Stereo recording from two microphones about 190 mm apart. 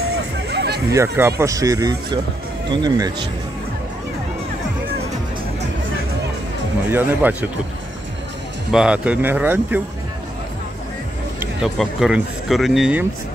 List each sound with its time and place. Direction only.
0.5 s a sound: 60° right (ahead or behind)
0.8 s speech: 15° right (ahead or behind)
6.9 s speech: 10° right (ahead or behind)
8.7 s speech: 5° right (ahead or behind)
11.3 s speech: centre (ahead or behind)